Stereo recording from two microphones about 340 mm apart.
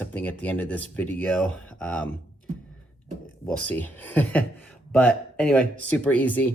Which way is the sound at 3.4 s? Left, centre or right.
Centre.